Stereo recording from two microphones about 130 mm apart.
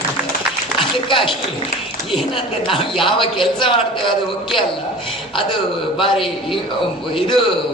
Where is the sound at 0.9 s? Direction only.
40° left (ahead or behind).